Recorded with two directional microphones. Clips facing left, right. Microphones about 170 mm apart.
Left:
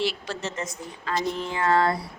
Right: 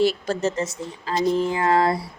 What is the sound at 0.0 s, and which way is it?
Speech, 45° right (ahead or behind).